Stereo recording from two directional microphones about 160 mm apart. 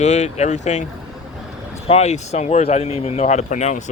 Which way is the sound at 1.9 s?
45° left (ahead or behind).